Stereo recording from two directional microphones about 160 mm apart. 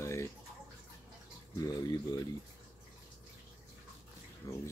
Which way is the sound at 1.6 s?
25° left (ahead or behind).